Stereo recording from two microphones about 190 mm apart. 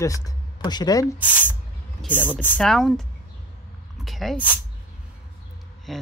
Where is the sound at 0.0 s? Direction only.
15° left (ahead or behind).